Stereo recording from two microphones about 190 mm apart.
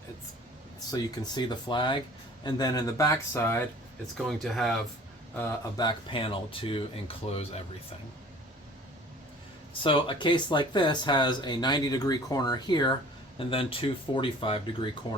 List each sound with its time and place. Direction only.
0.9 s speech: 20° left (ahead or behind)
4.3 s speech: centre (ahead or behind)
5.4 s speech: 15° left (ahead or behind)
9.8 s speech: 25° left (ahead or behind)